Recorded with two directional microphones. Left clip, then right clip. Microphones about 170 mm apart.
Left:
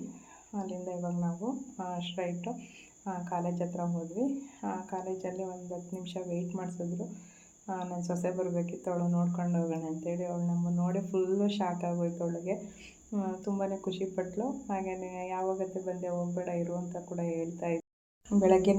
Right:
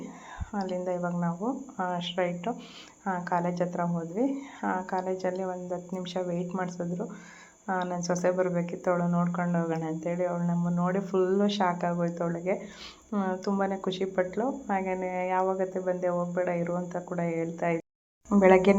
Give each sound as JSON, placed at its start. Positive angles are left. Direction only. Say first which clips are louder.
{"t": 0.5, "sound": "speech", "louder": "right 7 dB", "side_deg": -15}